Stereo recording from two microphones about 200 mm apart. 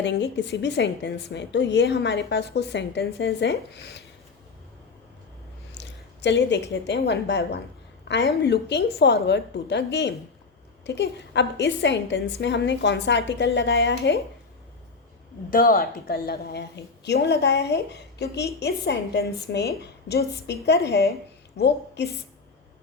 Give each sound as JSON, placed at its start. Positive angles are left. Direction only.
{"t": 0.0, "sound": "a woman's voice", "side_deg": 60}
{"t": 5.7, "sound": "a woman's voice", "side_deg": 60}
{"t": 15.4, "sound": "a woman's voice", "side_deg": 45}